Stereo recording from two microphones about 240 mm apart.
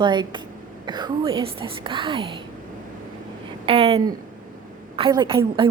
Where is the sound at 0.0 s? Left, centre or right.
Centre.